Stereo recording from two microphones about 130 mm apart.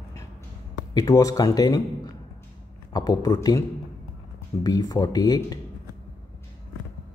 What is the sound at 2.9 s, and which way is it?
Speech, 30° left (ahead or behind).